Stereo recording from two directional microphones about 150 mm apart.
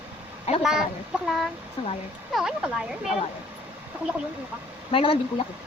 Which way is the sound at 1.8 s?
35° left (ahead or behind).